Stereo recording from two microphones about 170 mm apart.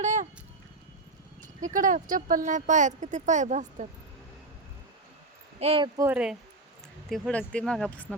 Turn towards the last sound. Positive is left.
turn(degrees=5)  # may be behind; listen again after turning